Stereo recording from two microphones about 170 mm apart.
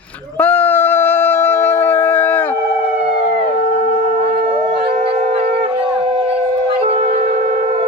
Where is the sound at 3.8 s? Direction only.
40° right (ahead or behind).